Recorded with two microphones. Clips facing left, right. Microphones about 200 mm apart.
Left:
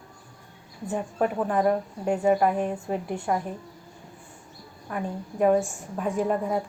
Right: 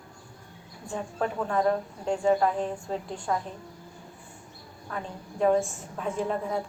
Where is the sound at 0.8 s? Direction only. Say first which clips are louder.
Left 4 dB; 15° left (ahead or behind).